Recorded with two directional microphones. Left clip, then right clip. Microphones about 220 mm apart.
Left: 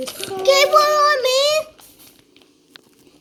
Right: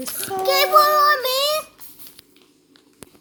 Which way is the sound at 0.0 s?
35° right (ahead or behind).